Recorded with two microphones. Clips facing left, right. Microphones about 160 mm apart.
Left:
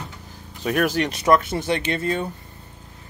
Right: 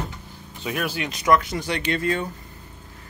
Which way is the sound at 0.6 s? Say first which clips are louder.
Left 6 dB; 45° left (ahead or behind).